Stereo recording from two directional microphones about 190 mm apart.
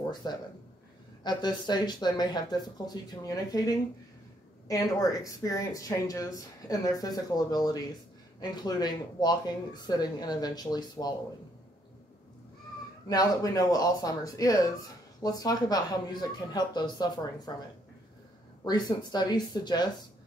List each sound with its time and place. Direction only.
0.2 s speech: 20° left (ahead or behind)
13.1 s speech: 20° left (ahead or behind)
18.6 s speech: 20° left (ahead or behind)